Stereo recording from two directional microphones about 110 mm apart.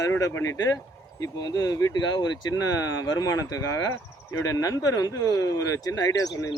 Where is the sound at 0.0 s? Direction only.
30° left (ahead or behind).